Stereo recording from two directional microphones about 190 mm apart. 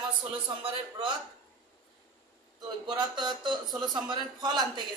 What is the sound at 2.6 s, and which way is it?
Speech, 25° right (ahead or behind).